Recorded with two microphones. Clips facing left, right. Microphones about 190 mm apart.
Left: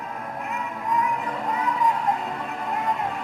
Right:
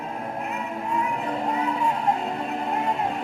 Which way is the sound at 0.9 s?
30° right (ahead or behind).